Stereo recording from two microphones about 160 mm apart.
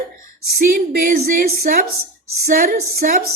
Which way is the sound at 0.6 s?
60° right (ahead or behind).